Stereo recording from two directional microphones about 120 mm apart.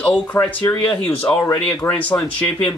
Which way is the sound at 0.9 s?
10° left (ahead or behind).